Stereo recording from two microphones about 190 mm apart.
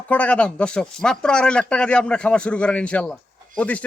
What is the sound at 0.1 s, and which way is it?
Speech, 5° left (ahead or behind).